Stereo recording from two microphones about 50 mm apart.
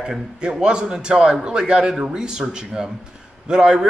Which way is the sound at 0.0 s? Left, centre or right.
Centre.